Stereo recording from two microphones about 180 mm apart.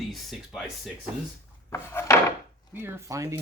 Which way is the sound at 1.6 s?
15° left (ahead or behind).